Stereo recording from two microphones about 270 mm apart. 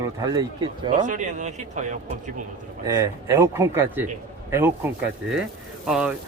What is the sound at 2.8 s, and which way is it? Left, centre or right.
Speech, centre.